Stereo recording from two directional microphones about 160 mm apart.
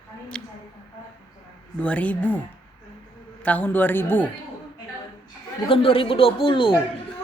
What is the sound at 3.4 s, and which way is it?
Speech, 10° left (ahead or behind).